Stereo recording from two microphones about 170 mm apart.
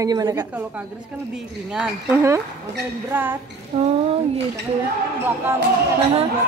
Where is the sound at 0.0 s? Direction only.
20° right (ahead or behind).